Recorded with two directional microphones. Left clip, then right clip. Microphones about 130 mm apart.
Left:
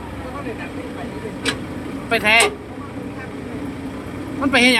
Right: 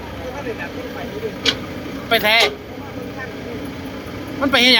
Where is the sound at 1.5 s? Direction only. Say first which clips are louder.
Right 4 dB; 25° left (ahead or behind).